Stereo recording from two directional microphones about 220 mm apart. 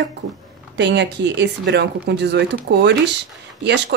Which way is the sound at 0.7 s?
50° right (ahead or behind).